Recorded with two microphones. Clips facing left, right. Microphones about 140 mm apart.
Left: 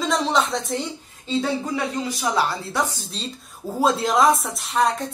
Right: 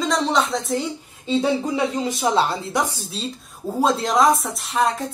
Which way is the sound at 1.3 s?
20° right (ahead or behind).